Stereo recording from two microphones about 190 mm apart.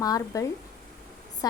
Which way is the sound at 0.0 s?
20° left (ahead or behind).